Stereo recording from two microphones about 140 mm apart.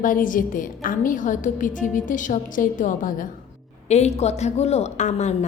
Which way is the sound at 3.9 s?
50° left (ahead or behind).